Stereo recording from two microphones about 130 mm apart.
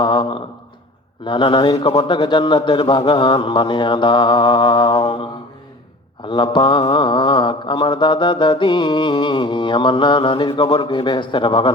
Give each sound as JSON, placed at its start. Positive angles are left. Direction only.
{"t": 0.0, "sound": "a sound", "side_deg": 40}
{"t": 1.2, "sound": "mantra", "side_deg": 40}
{"t": 6.2, "sound": "mantra", "side_deg": 40}